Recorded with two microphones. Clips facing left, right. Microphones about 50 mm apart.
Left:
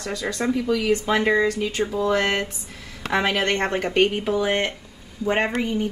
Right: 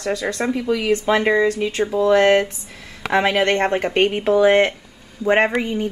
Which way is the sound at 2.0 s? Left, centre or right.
Right.